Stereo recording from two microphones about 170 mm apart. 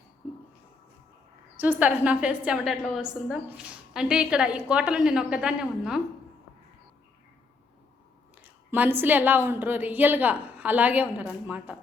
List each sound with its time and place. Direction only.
1.5 s a woman's voice: 10° right (ahead or behind)
8.4 s a woman's voice: 10° right (ahead or behind)